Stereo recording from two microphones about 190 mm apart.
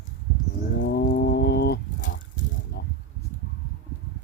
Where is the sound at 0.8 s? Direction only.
60° left (ahead or behind).